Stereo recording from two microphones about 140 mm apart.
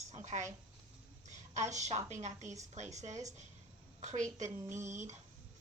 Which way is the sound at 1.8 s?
55° right (ahead or behind).